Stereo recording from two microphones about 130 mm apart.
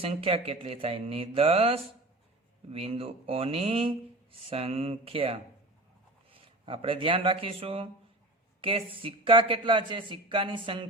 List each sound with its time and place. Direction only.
0.0 s speech: 50° right (ahead or behind)